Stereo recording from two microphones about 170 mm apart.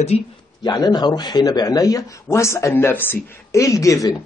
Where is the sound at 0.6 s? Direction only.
25° left (ahead or behind).